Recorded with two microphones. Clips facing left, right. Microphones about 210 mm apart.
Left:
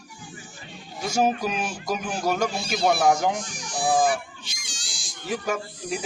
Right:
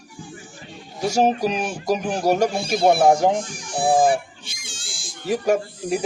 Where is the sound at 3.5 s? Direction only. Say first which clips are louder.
Right 4 dB; 55° right (ahead or behind).